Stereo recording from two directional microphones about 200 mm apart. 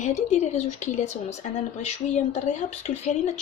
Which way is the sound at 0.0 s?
35° left (ahead or behind).